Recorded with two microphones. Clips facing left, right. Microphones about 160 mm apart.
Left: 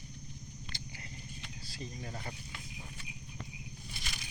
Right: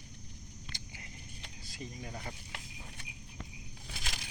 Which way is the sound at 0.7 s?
15° right (ahead or behind).